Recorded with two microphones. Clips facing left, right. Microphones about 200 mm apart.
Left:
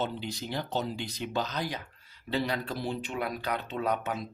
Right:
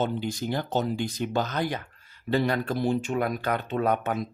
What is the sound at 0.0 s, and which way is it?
Speech, 50° right (ahead or behind).